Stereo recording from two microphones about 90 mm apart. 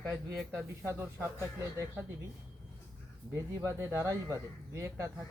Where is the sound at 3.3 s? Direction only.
35° right (ahead or behind).